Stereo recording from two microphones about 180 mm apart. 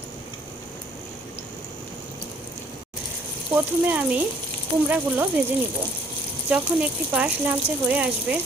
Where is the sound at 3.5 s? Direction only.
10° right (ahead or behind).